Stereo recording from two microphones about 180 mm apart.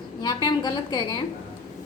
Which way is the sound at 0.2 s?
25° left (ahead or behind).